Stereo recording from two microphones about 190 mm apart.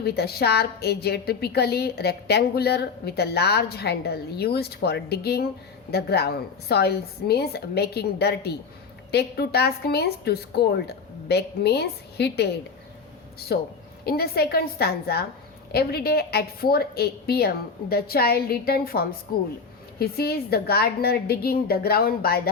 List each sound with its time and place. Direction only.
0.0 s a woman's voice: 55° left (ahead or behind)
13.5 s a woman's voice: 60° left (ahead or behind)